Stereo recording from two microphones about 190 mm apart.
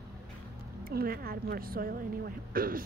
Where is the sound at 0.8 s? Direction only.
55° right (ahead or behind).